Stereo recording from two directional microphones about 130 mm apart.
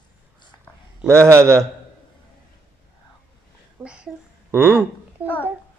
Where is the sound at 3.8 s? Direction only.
10° right (ahead or behind).